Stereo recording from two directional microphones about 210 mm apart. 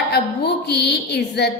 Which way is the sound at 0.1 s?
50° left (ahead or behind).